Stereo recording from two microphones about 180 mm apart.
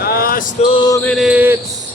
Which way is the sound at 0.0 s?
55° left (ahead or behind).